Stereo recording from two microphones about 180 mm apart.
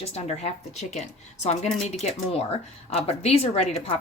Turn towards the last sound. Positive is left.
turn(degrees=35)  # may be behind; listen again after turning